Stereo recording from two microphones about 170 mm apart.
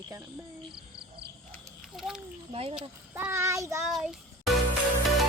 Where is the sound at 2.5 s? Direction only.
35° right (ahead or behind).